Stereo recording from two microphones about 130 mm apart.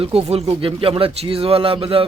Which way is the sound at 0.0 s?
50° right (ahead or behind).